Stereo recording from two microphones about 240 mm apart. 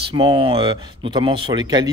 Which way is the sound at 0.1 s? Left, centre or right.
Right.